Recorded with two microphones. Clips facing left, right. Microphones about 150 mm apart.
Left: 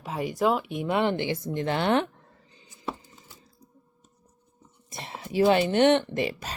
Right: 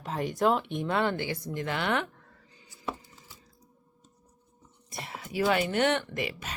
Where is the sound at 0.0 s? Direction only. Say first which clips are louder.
Left 1 dB; 5° left (ahead or behind).